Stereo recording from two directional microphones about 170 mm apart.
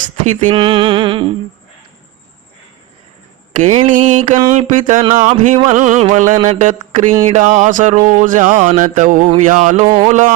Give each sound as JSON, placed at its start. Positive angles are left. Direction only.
{"t": 0.3, "sound": "speech", "side_deg": -45}
{"t": 0.5, "sound": "music", "side_deg": -30}
{"t": 3.5, "sound": "speech", "side_deg": -45}
{"t": 9.8, "sound": "music", "side_deg": -25}
{"t": 10.1, "sound": "speech", "side_deg": -45}